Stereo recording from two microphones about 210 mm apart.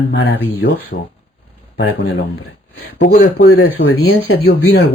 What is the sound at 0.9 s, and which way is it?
Speech, 50° left (ahead or behind).